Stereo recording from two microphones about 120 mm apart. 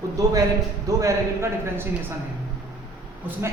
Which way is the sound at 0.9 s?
25° right (ahead or behind).